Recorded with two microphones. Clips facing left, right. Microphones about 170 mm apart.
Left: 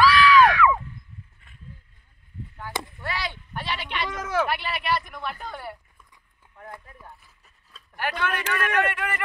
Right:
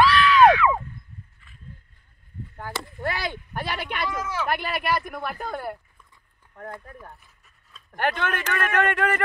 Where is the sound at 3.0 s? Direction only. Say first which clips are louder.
Right 4 dB; 50° right (ahead or behind).